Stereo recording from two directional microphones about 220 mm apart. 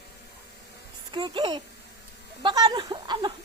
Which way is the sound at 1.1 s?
20° right (ahead or behind).